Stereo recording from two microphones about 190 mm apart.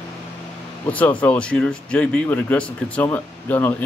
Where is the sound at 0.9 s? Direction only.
10° left (ahead or behind).